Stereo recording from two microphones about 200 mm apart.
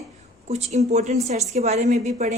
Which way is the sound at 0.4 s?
35° right (ahead or behind).